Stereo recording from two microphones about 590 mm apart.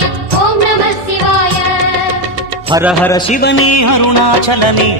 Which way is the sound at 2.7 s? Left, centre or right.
Centre.